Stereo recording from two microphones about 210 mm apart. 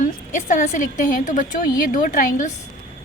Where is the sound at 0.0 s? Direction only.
35° left (ahead or behind).